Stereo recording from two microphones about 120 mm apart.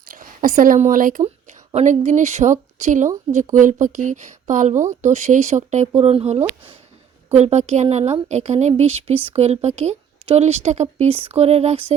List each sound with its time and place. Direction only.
0.5 s speech: 90° right; by 5.9 s 70° right (ahead or behind)
6.0 s a woman's voice: 55° right (ahead or behind)
7.3 s a woman's voice: 65° right (ahead or behind)